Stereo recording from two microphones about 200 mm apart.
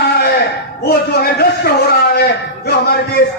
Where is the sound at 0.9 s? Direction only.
50° left (ahead or behind).